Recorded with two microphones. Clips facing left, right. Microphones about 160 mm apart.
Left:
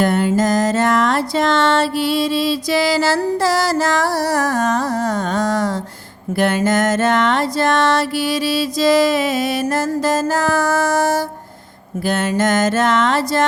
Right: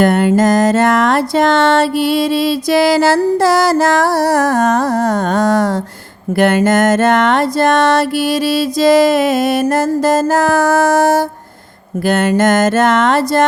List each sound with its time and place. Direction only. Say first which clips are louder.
0.0 s music: right 5 dB; 65° right (ahead or behind)
3.7 s carnatic music: right 5 dB; 60° right (ahead or behind)
6.4 s music: right 5 dB; 65° right (ahead or behind)